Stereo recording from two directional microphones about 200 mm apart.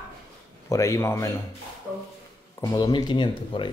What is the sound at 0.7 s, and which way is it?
Speech, 15° left (ahead or behind).